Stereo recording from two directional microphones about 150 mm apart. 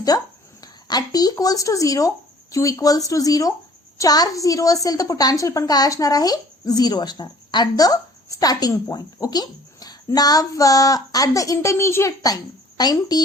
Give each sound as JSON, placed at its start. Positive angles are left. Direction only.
{"t": 0.1, "sound": "a woman's voice", "side_deg": 25}